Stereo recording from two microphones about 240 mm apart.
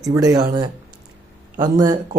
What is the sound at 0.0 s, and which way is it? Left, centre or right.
Speech, centre.